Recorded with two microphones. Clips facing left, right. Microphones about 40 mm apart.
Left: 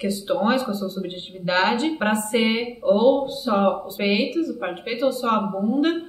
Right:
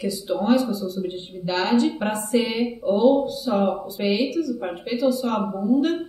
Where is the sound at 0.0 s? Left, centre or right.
Left.